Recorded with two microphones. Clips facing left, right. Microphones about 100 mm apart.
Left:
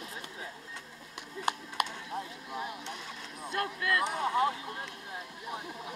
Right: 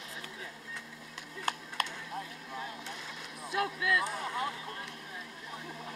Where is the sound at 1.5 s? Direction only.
15° left (ahead or behind).